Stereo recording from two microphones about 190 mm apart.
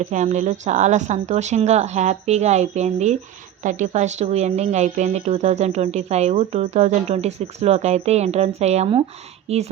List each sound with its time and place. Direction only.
0.0 s speech: 40° right (ahead or behind)